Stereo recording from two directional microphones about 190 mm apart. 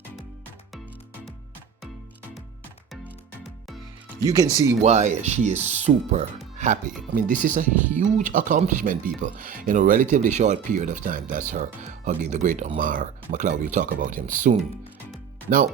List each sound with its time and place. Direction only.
4.2 s speech: 20° right (ahead or behind)
4.8 s speech: 35° right (ahead or behind)